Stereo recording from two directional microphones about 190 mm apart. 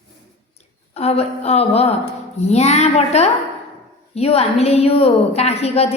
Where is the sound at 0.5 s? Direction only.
35° left (ahead or behind).